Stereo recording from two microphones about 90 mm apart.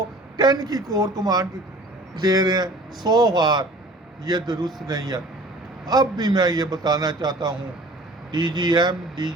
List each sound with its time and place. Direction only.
0.3 s a man's voice: 50° right (ahead or behind)